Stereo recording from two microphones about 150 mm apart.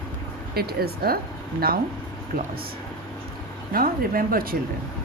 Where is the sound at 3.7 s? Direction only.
75° right (ahead or behind).